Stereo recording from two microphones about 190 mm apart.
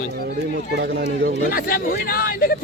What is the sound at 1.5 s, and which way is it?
Speech, 50° left (ahead or behind).